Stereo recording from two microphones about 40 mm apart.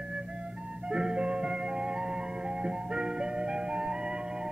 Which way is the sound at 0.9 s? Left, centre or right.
Right.